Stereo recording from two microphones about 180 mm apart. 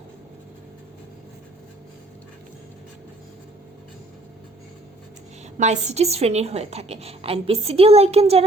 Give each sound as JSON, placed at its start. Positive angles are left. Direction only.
{"t": 5.5, "sound": "a woman's voice", "side_deg": -40}